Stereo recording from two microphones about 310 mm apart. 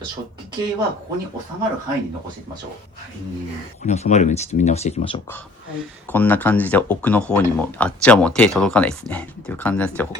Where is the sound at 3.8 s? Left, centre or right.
Left.